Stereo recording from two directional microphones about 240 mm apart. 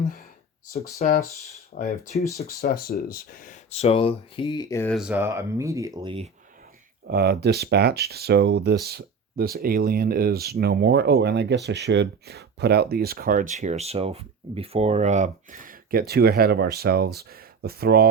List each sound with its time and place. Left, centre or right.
0.0 s a sound: left
1.0 s speech: left; by 4.9 s centre
4.9 s speech: centre; by 6.3 s right
7.1 s speech: right